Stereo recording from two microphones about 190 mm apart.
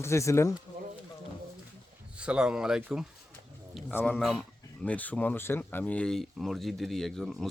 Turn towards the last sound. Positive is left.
turn(degrees=0)  # may be behind; listen again after turning